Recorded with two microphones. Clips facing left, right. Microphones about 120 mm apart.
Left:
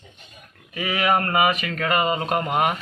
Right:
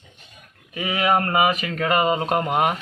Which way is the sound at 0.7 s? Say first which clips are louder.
Right 1 dB; 20° right (ahead or behind).